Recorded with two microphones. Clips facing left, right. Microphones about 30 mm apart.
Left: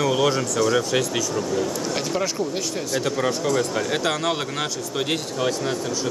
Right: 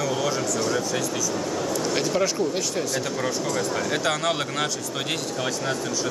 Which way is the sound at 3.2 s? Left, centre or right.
Centre.